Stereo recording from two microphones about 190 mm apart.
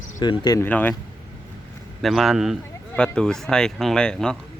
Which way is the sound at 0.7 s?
10° left (ahead or behind).